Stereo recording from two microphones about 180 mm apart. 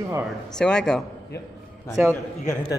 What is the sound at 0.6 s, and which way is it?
Speech, 5° left (ahead or behind).